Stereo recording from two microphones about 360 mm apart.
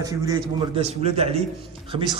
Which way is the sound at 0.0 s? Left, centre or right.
Centre.